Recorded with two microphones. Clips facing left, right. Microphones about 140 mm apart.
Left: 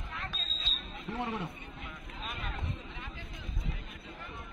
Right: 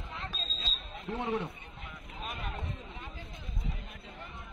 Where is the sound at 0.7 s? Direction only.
35° right (ahead or behind).